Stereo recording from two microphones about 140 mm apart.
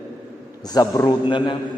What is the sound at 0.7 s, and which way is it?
Speech, 25° left (ahead or behind).